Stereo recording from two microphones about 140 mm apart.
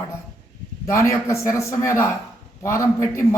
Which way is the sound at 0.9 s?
20° left (ahead or behind).